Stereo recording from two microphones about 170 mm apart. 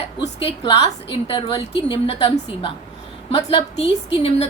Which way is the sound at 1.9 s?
30° left (ahead or behind).